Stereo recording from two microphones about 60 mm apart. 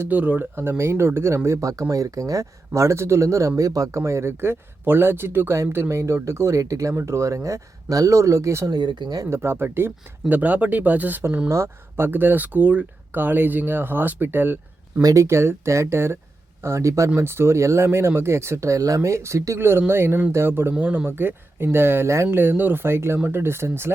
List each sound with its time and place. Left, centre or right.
0.1 s speech: right
0.5 s speech: right
1.6 s speech: right
3.6 s speech: right
4.0 s speech: right
6.0 s speech: right
6.9 s speech: right
9.3 s speech: right
11.4 s speech: right
15.0 s speech: right
17.2 s speech: right
20.7 s speech: right